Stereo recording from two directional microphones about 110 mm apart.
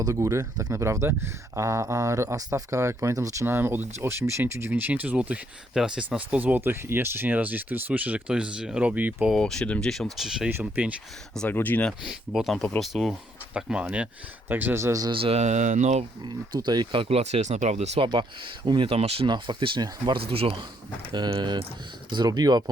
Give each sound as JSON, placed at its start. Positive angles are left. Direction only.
{"t": 0.0, "sound": "speech", "side_deg": -25}
{"t": 9.3, "sound": "speech", "side_deg": 5}
{"t": 11.4, "sound": "speech", "side_deg": 15}
{"t": 12.0, "sound": "speech", "side_deg": -5}
{"t": 15.1, "sound": "speech", "side_deg": -60}
{"t": 16.2, "sound": "speech", "side_deg": -40}
{"t": 18.0, "sound": "speech", "side_deg": -45}
{"t": 18.9, "sound": "speech", "side_deg": -65}
{"t": 19.3, "sound": "speech", "side_deg": -45}
{"t": 20.3, "sound": "speech", "side_deg": -55}